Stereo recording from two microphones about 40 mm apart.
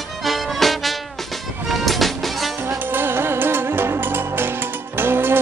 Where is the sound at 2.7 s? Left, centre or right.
Right.